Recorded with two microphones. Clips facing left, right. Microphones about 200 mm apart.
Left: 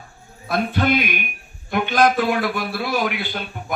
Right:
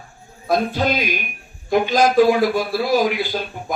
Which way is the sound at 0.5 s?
60° left (ahead or behind).